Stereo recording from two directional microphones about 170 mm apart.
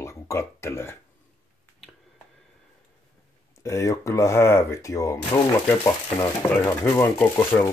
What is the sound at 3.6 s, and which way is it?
Speech, 15° left (ahead or behind).